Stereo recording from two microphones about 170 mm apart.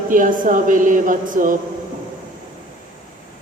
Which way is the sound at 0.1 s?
50° right (ahead or behind).